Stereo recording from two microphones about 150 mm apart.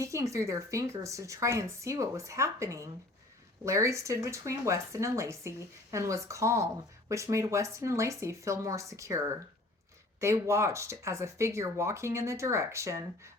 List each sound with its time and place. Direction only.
0.0 s speech: 20° right (ahead or behind)